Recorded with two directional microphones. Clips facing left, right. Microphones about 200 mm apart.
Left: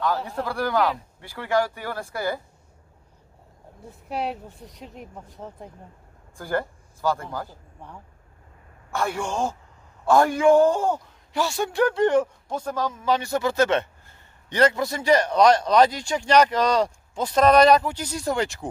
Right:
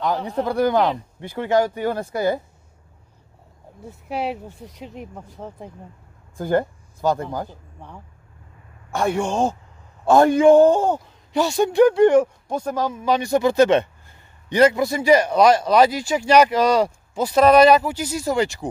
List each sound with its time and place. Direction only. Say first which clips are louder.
0.0 s speech: right 4 dB; 20° right (ahead or behind)
3.8 s speech: right 3 dB; centre (ahead or behind)
6.3 s speech: right 6 dB; 20° right (ahead or behind)
7.4 s speech: right 3 dB; centre (ahead or behind)
8.9 s speech: right 5 dB; 20° right (ahead or behind); by 18.7 s centre (ahead or behind)